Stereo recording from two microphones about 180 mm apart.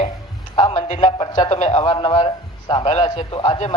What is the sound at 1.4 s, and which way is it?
Speech, 35° left (ahead or behind).